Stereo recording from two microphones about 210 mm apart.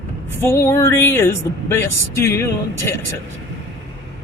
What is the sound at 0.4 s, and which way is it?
Speech, 10° left (ahead or behind).